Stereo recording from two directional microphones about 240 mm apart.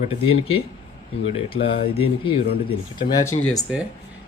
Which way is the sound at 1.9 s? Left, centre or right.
Left.